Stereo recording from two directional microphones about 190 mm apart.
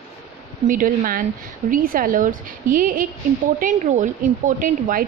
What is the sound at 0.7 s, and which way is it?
Speech, 45° right (ahead or behind).